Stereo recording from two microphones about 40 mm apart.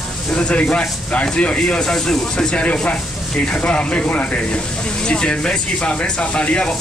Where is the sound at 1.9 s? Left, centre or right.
Centre.